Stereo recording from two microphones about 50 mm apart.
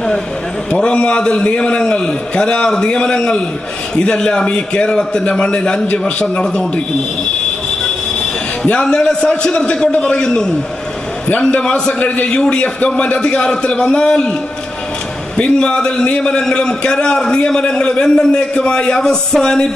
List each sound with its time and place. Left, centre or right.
0.7 s a man's voice: centre
6.2 s a man's voice: centre
8.6 s a man's voice: centre
11.5 s a man's voice: centre
15.3 s a man's voice: centre